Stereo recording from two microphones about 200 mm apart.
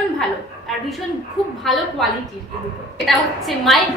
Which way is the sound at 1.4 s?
Centre (ahead or behind).